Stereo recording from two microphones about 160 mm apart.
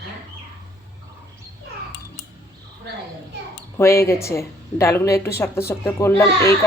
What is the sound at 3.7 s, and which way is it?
Speech, 15° left (ahead or behind).